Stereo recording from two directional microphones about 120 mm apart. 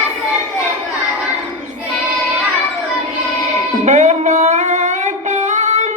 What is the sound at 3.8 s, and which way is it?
Music, 80° right.